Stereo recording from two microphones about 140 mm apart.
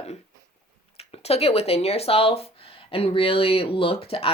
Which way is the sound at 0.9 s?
45° left (ahead or behind).